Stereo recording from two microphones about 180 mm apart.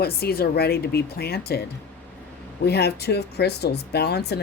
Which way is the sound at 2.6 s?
65° left (ahead or behind).